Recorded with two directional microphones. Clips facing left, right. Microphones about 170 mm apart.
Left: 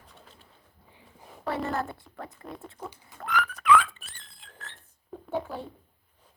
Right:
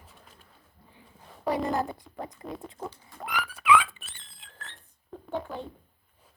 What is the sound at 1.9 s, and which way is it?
Speech, 15° right (ahead or behind).